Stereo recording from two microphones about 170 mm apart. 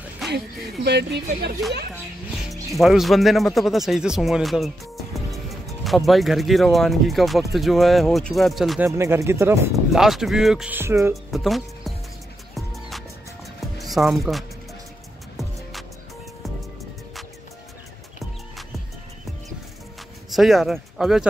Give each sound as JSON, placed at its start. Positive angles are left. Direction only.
{"t": 0.8, "sound": "speech", "side_deg": -80}
{"t": 2.7, "sound": "speech", "side_deg": 0}
{"t": 8.8, "sound": "speech", "side_deg": -15}
{"t": 9.9, "sound": "speech", "side_deg": 0}
{"t": 11.3, "sound": "speech", "side_deg": 0}
{"t": 13.7, "sound": "speech", "side_deg": 0}
{"t": 20.2, "sound": "speech", "side_deg": 0}